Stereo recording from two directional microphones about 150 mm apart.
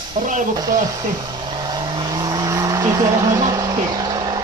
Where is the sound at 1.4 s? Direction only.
30° right (ahead or behind).